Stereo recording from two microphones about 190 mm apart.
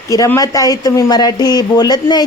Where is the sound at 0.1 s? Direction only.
15° left (ahead or behind).